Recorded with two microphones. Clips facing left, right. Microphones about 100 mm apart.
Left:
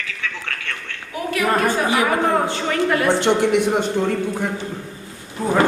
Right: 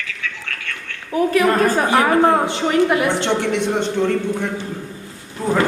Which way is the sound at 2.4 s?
20° right (ahead or behind).